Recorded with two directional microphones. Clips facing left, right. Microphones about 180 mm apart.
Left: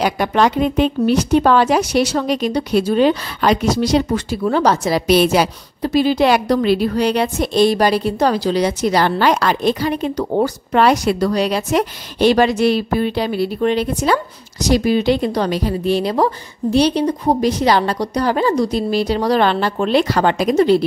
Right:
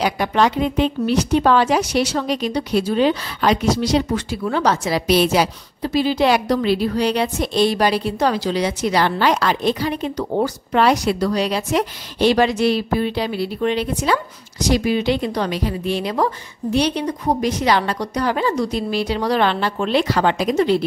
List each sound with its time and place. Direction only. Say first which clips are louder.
0.0 s speech: left 2 dB; 50° left (ahead or behind)